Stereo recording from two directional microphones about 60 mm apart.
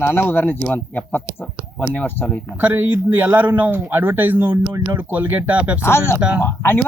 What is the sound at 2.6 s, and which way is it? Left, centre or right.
Speech, right.